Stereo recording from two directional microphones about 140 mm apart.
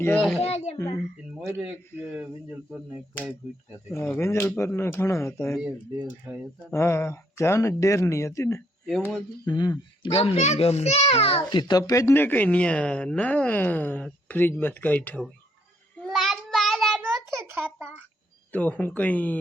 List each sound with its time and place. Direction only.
0.0 s speech: 5° left (ahead or behind)
0.3 s a child's voice: 50° left (ahead or behind)
1.5 s a man's voice: 10° right (ahead or behind)
3.9 s speech: 15° left (ahead or behind)
5.5 s a man's voice: 10° right (ahead or behind)
6.7 s speech: 20° left (ahead or behind)
10.2 s a child's voice: 50° left (ahead or behind)
11.7 s speech: 25° left (ahead or behind)
16.0 s child singing: centre (ahead or behind)
17.0 s a sound: 15° right (ahead or behind)
18.5 s speech: 10° left (ahead or behind)